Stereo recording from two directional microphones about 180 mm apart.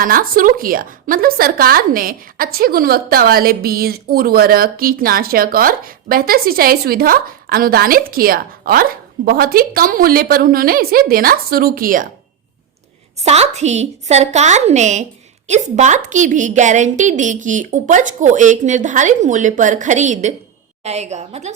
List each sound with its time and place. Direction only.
0.0 s a woman's voice: 50° right (ahead or behind)
13.2 s a woman's voice: 35° right (ahead or behind)